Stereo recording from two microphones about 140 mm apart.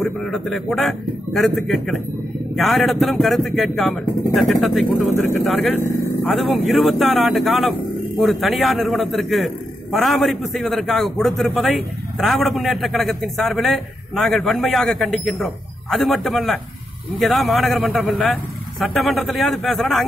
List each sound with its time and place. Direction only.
0.0 s a man's voice: centre (ahead or behind)